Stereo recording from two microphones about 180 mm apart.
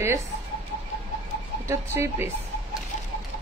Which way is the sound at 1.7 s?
15° right (ahead or behind).